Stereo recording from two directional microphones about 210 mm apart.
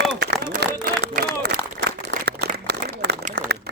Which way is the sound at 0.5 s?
40° right (ahead or behind).